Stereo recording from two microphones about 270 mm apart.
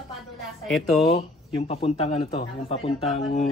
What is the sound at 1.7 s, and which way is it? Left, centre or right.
Speech, left.